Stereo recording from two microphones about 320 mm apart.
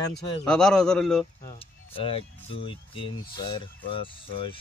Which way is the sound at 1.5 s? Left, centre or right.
Centre.